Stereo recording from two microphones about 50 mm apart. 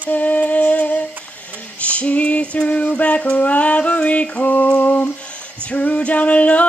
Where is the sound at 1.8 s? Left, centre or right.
Left.